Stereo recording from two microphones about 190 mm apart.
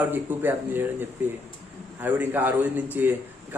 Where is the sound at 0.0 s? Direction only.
10° right (ahead or behind).